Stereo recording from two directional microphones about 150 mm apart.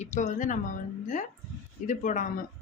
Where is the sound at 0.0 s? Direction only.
55° left (ahead or behind).